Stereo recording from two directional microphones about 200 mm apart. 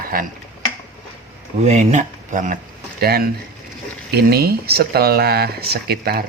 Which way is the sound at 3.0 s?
50° right (ahead or behind).